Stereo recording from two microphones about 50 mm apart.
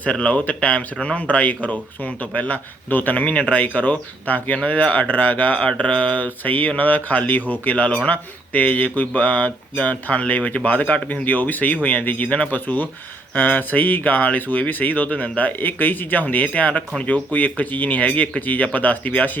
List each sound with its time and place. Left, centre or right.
0.0 s speech: left
5.6 s speech: left